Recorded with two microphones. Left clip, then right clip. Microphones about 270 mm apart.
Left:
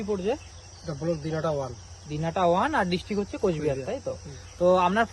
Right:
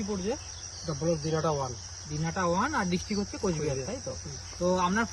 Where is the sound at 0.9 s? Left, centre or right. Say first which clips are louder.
Even; centre.